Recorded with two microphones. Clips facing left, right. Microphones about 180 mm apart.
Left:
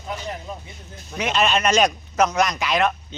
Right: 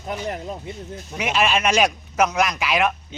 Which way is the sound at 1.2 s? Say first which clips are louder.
Even; 5° right (ahead or behind).